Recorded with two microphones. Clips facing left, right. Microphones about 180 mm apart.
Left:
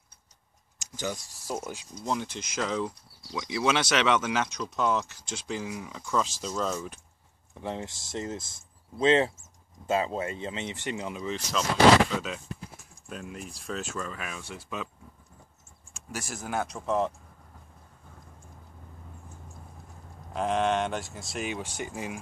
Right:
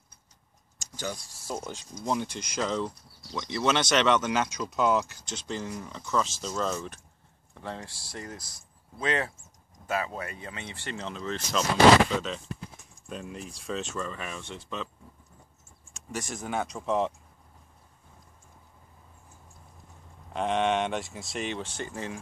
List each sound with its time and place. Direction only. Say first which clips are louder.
1.5 s speech: left 1 dB; 5° left (ahead or behind)
7.5 s speech: left 4 dB; 15° left (ahead or behind)
15.9 s speech: right 2 dB; 5° left (ahead or behind)
20.3 s speech: even; centre (ahead or behind)